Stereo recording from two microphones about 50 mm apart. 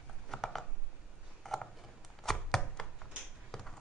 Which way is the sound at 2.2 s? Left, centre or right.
Centre.